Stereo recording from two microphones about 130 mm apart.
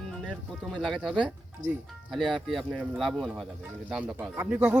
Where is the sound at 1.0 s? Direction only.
5° right (ahead or behind).